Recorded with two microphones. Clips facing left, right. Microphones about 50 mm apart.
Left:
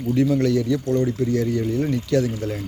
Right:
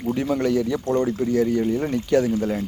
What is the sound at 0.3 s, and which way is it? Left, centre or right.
Speech, right.